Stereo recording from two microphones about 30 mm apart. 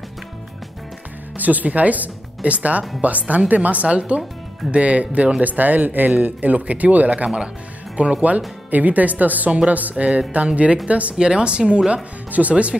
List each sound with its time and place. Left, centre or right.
1.4 s speech: right
5.4 s speech: right
8.6 s speech: right
10.3 s speech: right
11.1 s speech: right
12.3 s speech: right